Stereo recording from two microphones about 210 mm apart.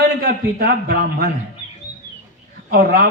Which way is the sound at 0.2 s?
50° right (ahead or behind).